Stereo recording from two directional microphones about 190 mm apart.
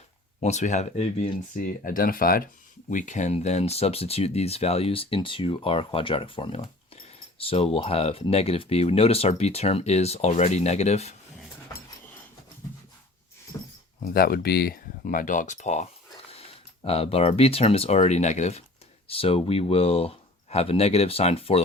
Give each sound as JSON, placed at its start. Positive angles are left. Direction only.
{"t": 0.3, "sound": "speech", "side_deg": 35}
{"t": 13.5, "sound": "a sound", "side_deg": 15}
{"t": 14.0, "sound": "speech", "side_deg": 50}